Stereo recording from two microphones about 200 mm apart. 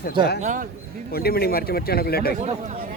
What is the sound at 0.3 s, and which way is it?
Speech, 40° right (ahead or behind).